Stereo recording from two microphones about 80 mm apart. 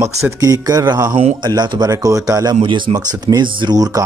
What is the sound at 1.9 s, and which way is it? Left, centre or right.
Speech, right.